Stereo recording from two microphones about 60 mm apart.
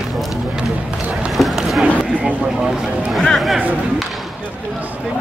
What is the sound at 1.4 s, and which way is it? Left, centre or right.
Speech, centre.